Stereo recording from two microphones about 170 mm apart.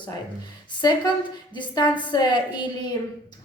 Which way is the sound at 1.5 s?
25° left (ahead or behind).